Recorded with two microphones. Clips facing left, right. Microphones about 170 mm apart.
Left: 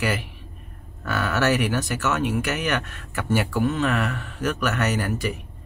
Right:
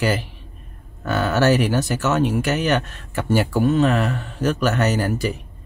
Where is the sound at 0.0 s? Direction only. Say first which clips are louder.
Right 4 dB; 30° right (ahead or behind).